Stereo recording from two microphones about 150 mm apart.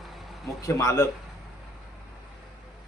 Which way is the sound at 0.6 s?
20° left (ahead or behind).